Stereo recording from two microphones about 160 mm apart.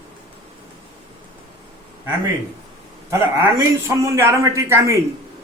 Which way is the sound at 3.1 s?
15° right (ahead or behind).